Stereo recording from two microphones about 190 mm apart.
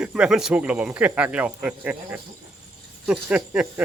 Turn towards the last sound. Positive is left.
turn(degrees=-5)  # may be behind; listen again after turning